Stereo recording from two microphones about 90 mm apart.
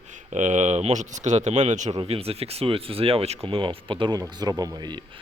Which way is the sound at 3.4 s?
80° right.